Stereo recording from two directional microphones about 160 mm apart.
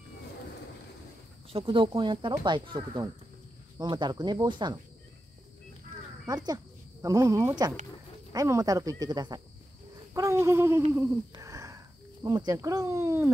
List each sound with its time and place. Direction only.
1.5 s speech: 30° right (ahead or behind)
6.2 s speech: 25° right (ahead or behind)
10.1 s a sound: 20° right (ahead or behind)
11.3 s cricket: 20° right (ahead or behind)